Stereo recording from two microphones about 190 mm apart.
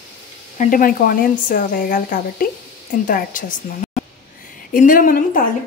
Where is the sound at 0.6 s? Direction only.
45° left (ahead or behind).